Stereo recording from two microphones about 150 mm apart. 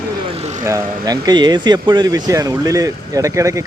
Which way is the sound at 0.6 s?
25° right (ahead or behind).